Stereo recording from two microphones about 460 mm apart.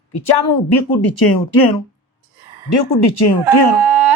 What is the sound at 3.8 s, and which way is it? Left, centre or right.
Carnatic music, right.